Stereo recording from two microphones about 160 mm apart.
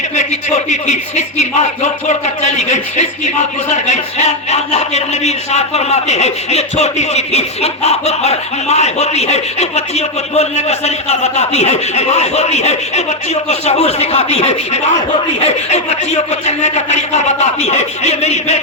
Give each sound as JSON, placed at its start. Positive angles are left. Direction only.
{"t": 0.2, "sound": "speech", "side_deg": 45}